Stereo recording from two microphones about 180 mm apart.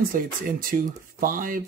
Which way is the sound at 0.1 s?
50° right (ahead or behind).